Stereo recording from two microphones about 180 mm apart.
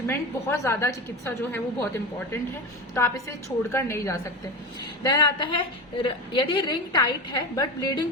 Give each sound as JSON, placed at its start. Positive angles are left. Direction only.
{"t": 0.1, "sound": "a woman's voice", "side_deg": 15}